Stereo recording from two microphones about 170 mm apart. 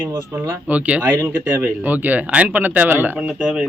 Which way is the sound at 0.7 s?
10° right (ahead or behind).